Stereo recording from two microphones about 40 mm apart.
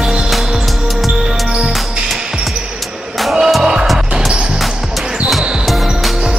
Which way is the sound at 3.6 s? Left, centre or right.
Centre.